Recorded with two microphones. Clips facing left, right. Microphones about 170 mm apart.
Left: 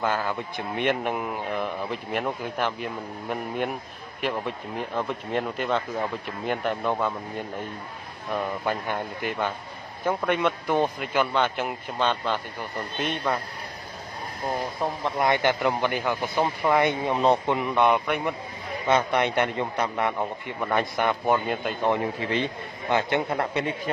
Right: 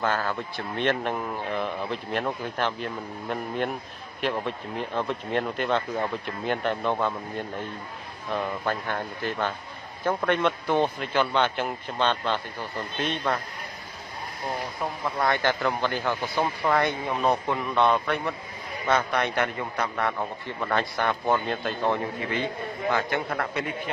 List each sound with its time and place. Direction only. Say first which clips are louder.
0.0 s a man's voice: even; 10° left (ahead or behind)
15.0 s a man's voice: left 2 dB; 20° left (ahead or behind)
22.2 s a man's voice: left 1 dB; 25° left (ahead or behind)